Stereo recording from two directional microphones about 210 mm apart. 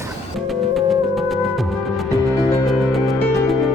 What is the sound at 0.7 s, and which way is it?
Music, centre (ahead or behind).